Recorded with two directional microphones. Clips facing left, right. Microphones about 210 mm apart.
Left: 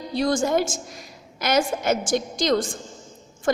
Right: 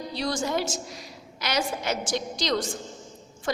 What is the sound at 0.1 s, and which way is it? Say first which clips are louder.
A woman's voice: left 7 dB; 50° left (ahead or behind).